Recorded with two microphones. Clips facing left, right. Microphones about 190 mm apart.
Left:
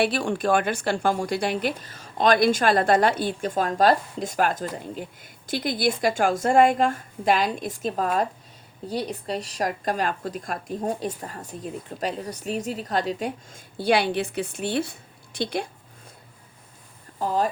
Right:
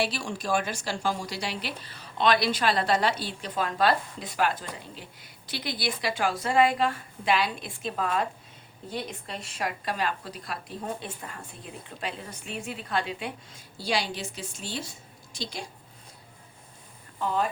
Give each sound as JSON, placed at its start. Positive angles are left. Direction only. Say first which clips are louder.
{"t": 0.0, "sound": "speech", "louder": "left 7 dB", "side_deg": 55}
{"t": 17.2, "sound": "speech", "louder": "left 4 dB", "side_deg": 40}